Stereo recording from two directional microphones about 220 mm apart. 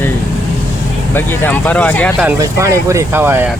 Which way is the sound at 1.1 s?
10° left (ahead or behind).